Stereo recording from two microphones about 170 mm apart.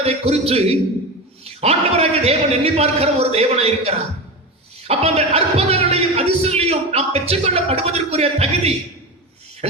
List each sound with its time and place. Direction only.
0.0 s speech: 35° right (ahead or behind)